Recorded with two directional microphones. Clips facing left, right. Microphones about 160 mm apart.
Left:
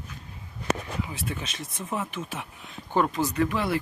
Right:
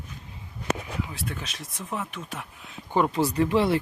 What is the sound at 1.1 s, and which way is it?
Speech, centre (ahead or behind).